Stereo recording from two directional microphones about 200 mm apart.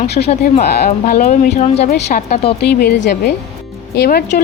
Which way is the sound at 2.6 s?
55° left (ahead or behind).